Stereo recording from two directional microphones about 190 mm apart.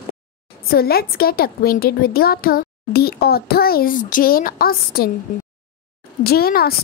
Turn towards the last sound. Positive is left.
turn(degrees=55)  # may be behind; listen again after turning